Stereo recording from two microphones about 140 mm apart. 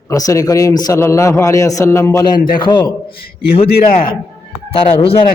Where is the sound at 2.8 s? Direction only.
90° left.